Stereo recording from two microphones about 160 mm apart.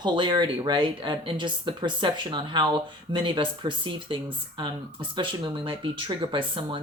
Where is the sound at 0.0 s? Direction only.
25° right (ahead or behind).